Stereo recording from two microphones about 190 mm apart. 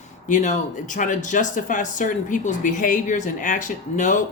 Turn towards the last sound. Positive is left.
turn(degrees=40)  # may be behind; listen again after turning